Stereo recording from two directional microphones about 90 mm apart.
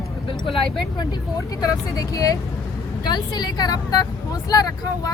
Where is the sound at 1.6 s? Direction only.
40° left (ahead or behind).